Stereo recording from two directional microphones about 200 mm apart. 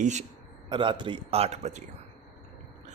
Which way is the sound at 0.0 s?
35° right (ahead or behind).